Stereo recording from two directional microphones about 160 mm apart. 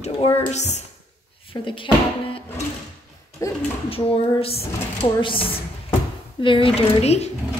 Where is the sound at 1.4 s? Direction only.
30° left (ahead or behind).